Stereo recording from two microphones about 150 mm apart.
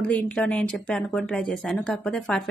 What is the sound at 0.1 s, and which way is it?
A woman's voice, 10° left (ahead or behind).